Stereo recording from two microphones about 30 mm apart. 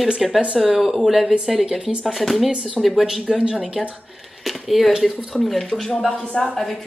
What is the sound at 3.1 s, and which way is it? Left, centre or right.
Speech, centre.